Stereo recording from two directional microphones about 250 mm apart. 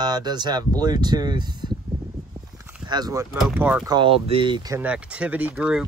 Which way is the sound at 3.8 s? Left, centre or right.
Centre.